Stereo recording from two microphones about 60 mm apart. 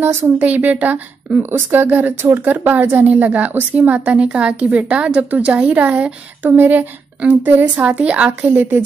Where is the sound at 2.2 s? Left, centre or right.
Right.